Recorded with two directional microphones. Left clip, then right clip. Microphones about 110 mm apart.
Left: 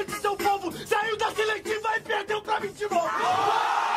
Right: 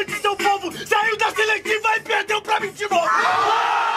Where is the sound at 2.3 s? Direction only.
20° right (ahead or behind).